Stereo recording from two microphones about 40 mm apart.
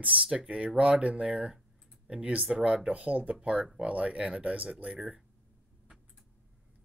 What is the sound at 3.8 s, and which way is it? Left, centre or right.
Speech, right.